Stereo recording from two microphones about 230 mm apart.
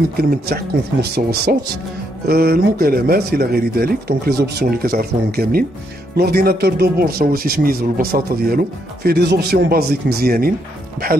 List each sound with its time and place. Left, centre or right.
0.2 s speech: right